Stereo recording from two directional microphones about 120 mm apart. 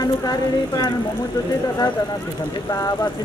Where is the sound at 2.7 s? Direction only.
30° left (ahead or behind).